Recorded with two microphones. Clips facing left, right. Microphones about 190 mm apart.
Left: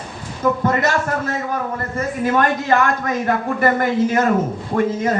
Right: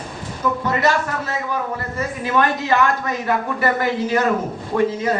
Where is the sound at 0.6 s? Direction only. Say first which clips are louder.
Left 1 dB; 50° left (ahead or behind).